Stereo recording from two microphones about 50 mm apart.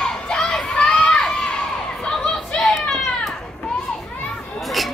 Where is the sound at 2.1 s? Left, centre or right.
Centre.